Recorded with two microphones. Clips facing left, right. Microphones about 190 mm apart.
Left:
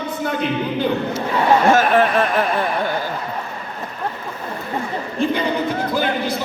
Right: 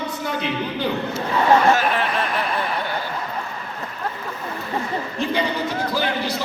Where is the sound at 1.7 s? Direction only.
50° left (ahead or behind).